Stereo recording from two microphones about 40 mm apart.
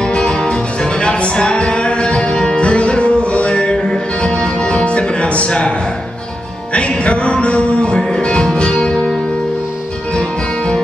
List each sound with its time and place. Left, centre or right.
0.0 s music: left
6.7 s music: left